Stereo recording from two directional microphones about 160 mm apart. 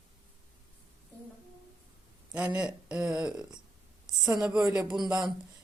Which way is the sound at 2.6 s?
5° right (ahead or behind).